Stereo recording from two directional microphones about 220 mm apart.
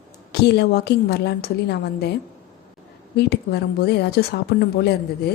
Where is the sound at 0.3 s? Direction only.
50° left (ahead or behind).